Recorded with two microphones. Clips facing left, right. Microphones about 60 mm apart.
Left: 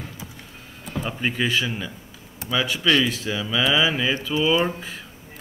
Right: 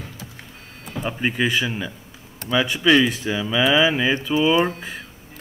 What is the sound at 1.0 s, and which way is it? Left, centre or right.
Speech, centre.